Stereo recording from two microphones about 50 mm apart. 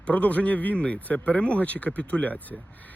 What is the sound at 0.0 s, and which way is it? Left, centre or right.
Speech, left.